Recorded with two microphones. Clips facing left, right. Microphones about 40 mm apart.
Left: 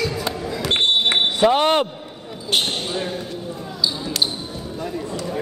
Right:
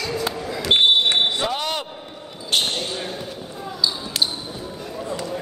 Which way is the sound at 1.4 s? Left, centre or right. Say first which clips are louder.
Left 9 dB; left.